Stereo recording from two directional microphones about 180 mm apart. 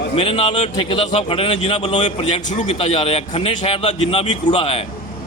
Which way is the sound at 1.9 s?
40° left (ahead or behind).